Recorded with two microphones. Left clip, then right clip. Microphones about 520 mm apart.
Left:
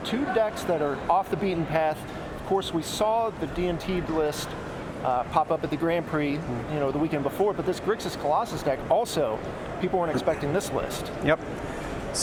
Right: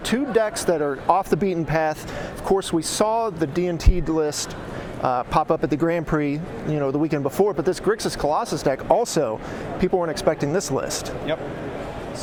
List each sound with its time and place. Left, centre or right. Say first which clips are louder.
0.1 s speech: right 4 dB; right
11.3 s speech: left 3 dB; left